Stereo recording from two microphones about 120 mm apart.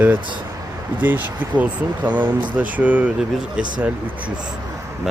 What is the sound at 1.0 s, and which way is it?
Speech, 15° right (ahead or behind).